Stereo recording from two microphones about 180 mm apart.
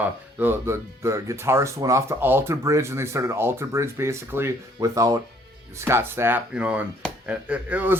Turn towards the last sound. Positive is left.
turn(degrees=-10)  # may be behind; listen again after turning